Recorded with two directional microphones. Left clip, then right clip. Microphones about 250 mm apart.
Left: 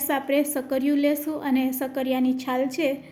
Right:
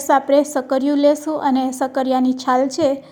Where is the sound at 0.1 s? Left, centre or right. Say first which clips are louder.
Right 9 dB; centre.